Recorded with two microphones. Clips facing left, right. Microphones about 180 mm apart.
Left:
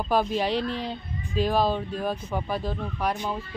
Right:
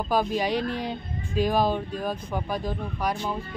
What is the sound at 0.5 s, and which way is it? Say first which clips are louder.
Speech: even; 50° right (ahead or behind).